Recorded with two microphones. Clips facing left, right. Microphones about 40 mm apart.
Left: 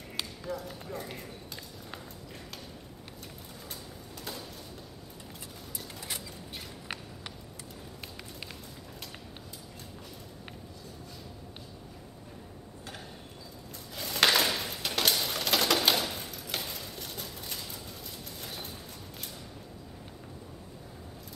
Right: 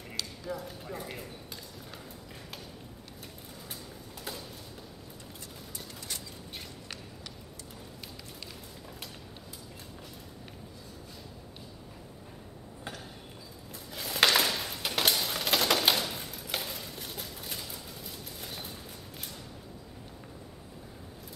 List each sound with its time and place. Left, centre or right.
0.5 s speech: centre
4.2 s a sound: centre
5.9 s bird: centre
13.9 s typewriter: centre